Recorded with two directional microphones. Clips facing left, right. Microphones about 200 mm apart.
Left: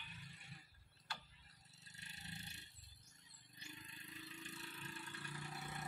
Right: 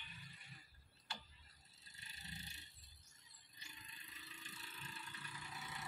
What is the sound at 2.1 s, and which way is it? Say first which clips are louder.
Roar: left 1 dB; 65° left (ahead or behind).